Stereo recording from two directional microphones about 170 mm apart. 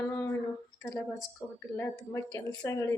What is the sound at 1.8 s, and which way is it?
A woman's voice, 20° left (ahead or behind).